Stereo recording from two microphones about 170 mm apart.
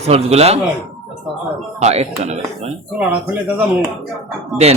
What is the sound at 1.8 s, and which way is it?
Speech, 40° right (ahead or behind).